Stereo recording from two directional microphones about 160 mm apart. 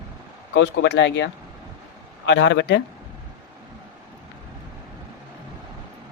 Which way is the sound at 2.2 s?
90° left.